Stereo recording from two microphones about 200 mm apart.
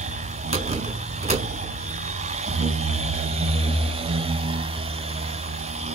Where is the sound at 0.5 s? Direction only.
35° right (ahead or behind).